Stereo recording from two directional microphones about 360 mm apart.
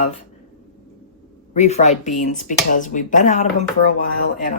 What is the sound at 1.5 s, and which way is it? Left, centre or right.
Speech, centre.